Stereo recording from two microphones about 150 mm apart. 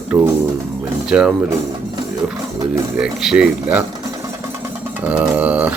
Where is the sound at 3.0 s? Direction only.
5° right (ahead or behind).